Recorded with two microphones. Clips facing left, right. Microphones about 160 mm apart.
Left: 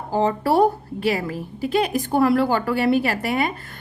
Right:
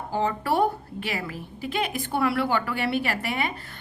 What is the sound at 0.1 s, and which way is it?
A woman's voice, 35° left (ahead or behind).